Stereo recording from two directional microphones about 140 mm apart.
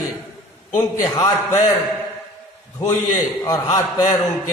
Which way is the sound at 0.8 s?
20° left (ahead or behind).